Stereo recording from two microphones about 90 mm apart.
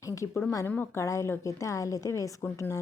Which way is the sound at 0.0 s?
35° left (ahead or behind).